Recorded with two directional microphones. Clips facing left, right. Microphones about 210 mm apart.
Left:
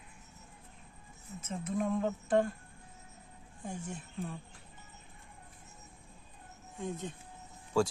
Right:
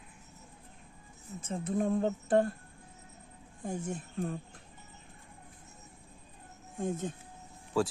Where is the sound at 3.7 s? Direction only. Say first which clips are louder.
Right 5 dB; 40° right (ahead or behind).